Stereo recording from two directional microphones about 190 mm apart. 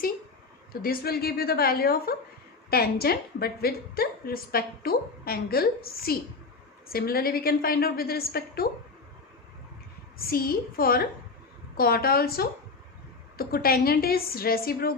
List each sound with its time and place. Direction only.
0.7 s a woman's voice: 50° left (ahead or behind)
10.2 s a woman's voice: 50° left (ahead or behind)